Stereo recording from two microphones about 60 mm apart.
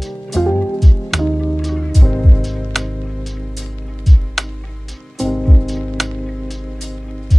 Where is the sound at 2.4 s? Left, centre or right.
Centre.